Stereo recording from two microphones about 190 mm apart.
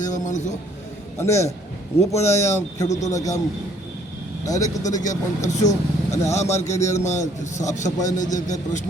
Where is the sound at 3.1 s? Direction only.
15° left (ahead or behind).